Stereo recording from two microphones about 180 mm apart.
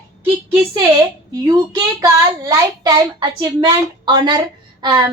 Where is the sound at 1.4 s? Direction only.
20° right (ahead or behind).